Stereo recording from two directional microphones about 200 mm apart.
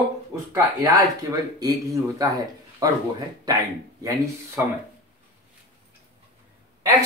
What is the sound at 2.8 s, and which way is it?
Speech, 15° right (ahead or behind).